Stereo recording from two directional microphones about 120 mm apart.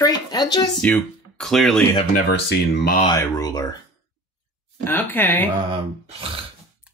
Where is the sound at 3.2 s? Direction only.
30° left (ahead or behind).